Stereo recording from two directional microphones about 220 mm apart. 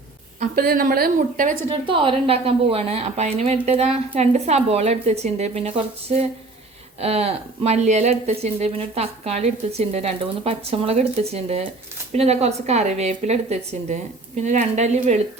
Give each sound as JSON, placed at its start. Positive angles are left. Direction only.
{"t": 0.3, "sound": "a woman's voice", "side_deg": -40}